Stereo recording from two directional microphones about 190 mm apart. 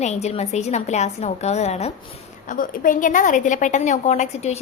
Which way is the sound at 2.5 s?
45° left (ahead or behind).